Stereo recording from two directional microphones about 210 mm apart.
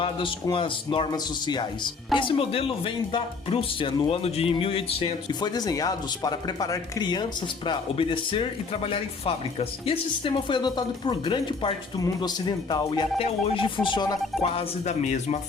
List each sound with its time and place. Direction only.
0.0 s speech: 25° left (ahead or behind)